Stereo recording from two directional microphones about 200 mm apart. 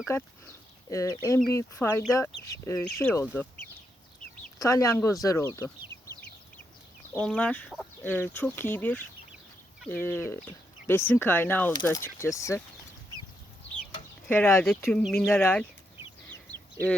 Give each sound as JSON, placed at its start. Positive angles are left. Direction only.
{"t": 0.1, "sound": "speech", "side_deg": 10}
{"t": 4.6, "sound": "speech", "side_deg": 15}
{"t": 7.3, "sound": "speech", "side_deg": 5}
{"t": 14.3, "sound": "speech", "side_deg": 10}